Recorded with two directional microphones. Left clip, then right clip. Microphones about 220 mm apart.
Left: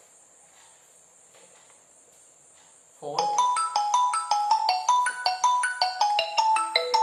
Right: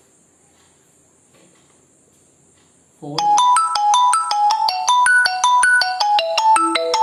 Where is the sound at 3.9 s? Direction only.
40° right (ahead or behind).